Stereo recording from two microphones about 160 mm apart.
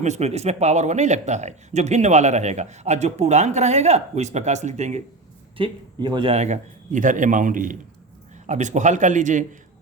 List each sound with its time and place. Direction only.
0.0 s speech: 45° right (ahead or behind)
5.5 s speech: 30° right (ahead or behind)
6.3 s a man's voice: 45° right (ahead or behind)